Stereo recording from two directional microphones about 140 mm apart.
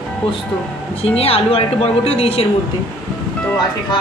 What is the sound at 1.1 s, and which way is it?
Speech, 45° left (ahead or behind).